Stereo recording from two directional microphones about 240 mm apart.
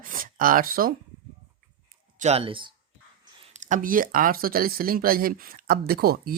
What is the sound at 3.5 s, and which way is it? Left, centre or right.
Speech, right.